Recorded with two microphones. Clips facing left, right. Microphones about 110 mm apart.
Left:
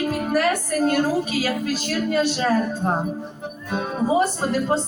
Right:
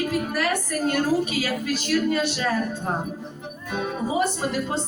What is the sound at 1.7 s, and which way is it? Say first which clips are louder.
Speech: even; 35° left (ahead or behind).